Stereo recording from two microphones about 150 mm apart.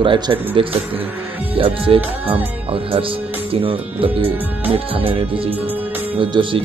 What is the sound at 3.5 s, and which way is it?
Speech, 40° right (ahead or behind).